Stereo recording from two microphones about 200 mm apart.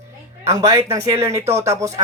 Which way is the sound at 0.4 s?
15° right (ahead or behind).